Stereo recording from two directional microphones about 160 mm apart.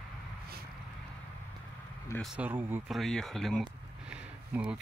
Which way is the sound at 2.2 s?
5° right (ahead or behind).